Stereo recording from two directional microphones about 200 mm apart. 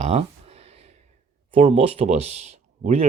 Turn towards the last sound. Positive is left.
turn(degrees=-35)  # may be behind; listen again after turning